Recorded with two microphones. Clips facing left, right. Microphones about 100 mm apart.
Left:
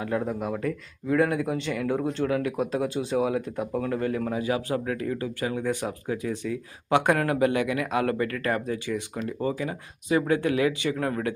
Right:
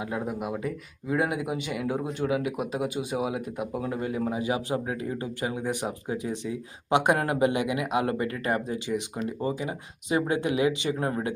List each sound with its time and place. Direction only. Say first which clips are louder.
0.0 s speech: left 3 dB; 10° right (ahead or behind)